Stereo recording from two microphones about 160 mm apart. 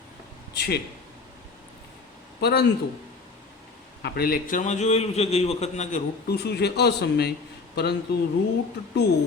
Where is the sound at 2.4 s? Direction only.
90° left.